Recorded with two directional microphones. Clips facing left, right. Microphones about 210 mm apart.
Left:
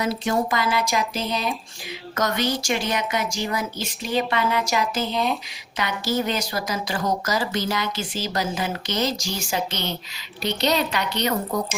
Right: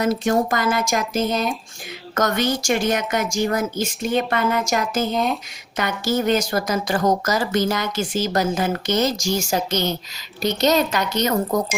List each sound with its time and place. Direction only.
0.0 s speech: 50° right (ahead or behind)
4.0 s speech: centre (ahead or behind)
4.3 s speech: 50° right (ahead or behind)